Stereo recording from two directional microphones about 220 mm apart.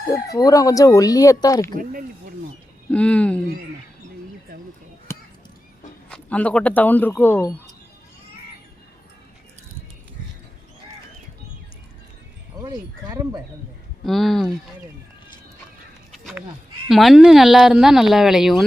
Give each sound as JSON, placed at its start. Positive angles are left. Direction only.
{"t": 0.1, "sound": "speech", "side_deg": 15}
{"t": 1.7, "sound": "speech", "side_deg": -40}
{"t": 2.9, "sound": "speech", "side_deg": 5}
{"t": 5.1, "sound": "a sound", "side_deg": 10}
{"t": 6.1, "sound": "speech", "side_deg": 5}
{"t": 12.5, "sound": "speech", "side_deg": -15}
{"t": 14.0, "sound": "speech", "side_deg": 0}
{"t": 16.1, "sound": "a sound", "side_deg": 0}
{"t": 16.9, "sound": "speech", "side_deg": 0}